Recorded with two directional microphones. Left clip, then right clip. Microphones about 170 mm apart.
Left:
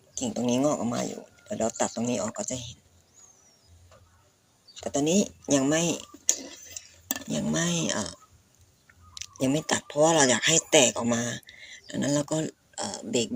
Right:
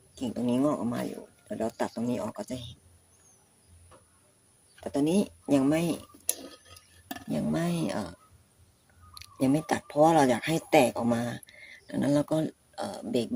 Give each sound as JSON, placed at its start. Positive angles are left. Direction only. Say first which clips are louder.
{"t": 0.2, "sound": "speech", "louder": "left 2 dB", "side_deg": -15}
{"t": 4.8, "sound": "speech", "louder": "left 2 dB", "side_deg": -15}
{"t": 9.1, "sound": "speech", "louder": "even", "side_deg": -20}